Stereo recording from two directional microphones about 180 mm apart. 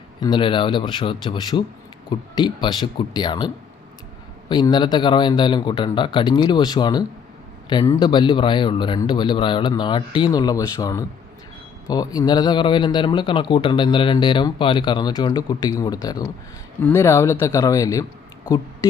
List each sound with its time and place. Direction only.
0.2 s a man's voice: 25° left (ahead or behind)